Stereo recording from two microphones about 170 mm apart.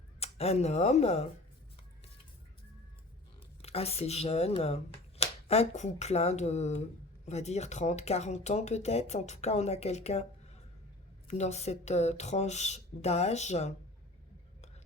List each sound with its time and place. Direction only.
0.2 s speech: 35° left (ahead or behind)
3.6 s speech: 35° left (ahead or behind)
11.3 s speech: 40° left (ahead or behind)